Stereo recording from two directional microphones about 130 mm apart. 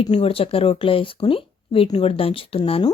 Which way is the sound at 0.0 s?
55° left (ahead or behind).